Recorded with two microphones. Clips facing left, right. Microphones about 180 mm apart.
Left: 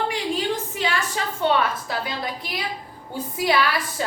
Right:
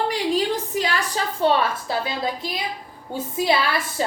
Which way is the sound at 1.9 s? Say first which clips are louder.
Right 3 dB; 25° right (ahead or behind).